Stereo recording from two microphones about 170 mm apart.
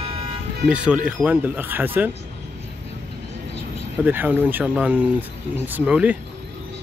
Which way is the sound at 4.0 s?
10° right (ahead or behind).